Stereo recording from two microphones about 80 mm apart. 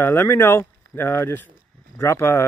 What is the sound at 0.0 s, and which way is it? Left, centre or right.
Speech, left.